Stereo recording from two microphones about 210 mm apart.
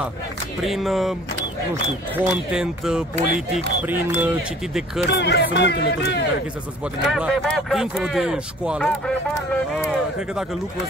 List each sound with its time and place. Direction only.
0.7 s speech: centre (ahead or behind)
2.1 s speech: 5° right (ahead or behind)
5.1 s speech: 50° left (ahead or behind)
7.1 s speech: centre (ahead or behind)